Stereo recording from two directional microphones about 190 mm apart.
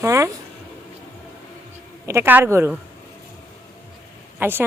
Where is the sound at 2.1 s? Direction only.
10° right (ahead or behind).